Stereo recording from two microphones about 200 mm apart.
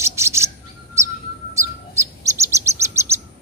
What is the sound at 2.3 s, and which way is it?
Bird, 15° right (ahead or behind).